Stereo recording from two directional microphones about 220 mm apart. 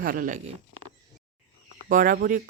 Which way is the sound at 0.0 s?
40° right (ahead or behind).